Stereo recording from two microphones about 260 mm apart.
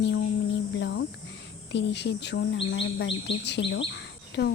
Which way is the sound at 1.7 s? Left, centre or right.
Left.